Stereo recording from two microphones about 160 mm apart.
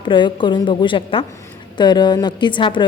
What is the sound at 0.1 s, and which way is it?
A woman's voice, 30° left (ahead or behind).